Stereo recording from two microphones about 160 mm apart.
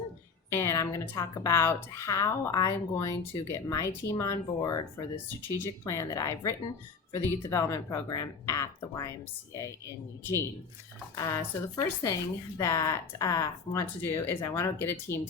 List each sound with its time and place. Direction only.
0.5 s speech: 20° left (ahead or behind)
11.1 s speech: 20° left (ahead or behind)